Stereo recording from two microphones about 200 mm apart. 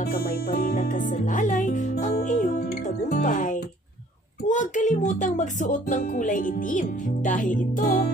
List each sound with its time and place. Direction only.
0.0 s music: 50° left (ahead or behind)
4.5 s speech: 40° left (ahead or behind)